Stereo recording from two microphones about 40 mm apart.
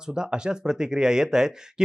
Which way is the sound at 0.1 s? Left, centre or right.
Right.